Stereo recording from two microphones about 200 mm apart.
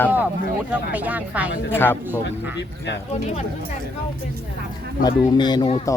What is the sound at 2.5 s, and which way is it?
Speech, 60° left (ahead or behind).